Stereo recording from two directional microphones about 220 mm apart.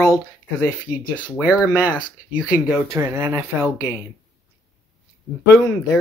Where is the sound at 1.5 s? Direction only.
5° right (ahead or behind).